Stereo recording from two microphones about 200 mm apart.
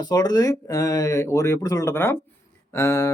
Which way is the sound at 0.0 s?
20° left (ahead or behind).